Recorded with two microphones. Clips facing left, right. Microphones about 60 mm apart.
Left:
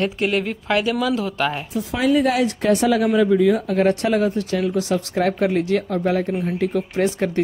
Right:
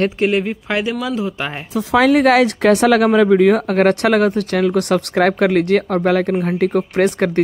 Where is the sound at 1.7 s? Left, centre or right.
Right.